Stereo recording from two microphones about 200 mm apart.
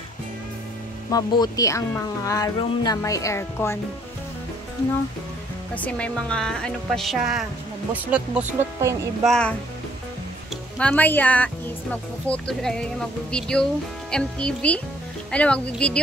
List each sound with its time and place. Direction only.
1.1 s speech: 20° left (ahead or behind)
5.8 s speech: 5° left (ahead or behind)
9.3 s speech: 5° left (ahead or behind)
10.8 s speech: 5° left (ahead or behind)